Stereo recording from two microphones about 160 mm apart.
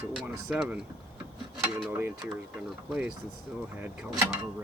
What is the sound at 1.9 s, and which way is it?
Speech, 10° right (ahead or behind).